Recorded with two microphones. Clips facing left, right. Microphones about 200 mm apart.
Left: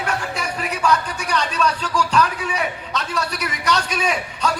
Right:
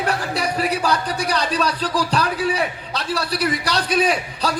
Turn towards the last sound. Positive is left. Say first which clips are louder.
# right 1 dB
turn(degrees=-35)  # may be behind; listen again after turning